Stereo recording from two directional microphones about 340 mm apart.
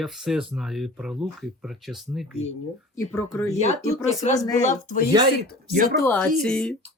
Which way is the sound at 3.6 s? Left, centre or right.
Centre.